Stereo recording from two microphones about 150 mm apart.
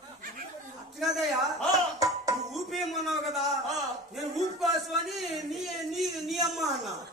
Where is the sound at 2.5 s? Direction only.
Centre (ahead or behind).